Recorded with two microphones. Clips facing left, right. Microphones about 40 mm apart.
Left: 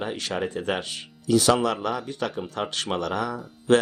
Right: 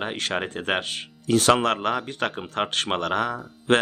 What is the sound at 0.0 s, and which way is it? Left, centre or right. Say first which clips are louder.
Speech: right 1 dB; right.